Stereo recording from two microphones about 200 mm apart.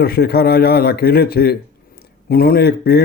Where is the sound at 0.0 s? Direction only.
50° left (ahead or behind).